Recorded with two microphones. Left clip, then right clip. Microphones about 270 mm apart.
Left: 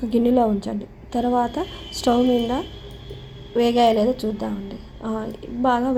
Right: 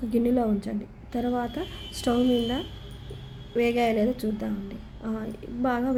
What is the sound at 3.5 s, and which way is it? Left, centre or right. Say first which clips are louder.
A woman's voice: left 7 dB; centre.